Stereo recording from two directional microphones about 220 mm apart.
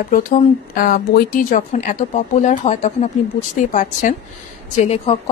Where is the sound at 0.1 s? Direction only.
40° left (ahead or behind).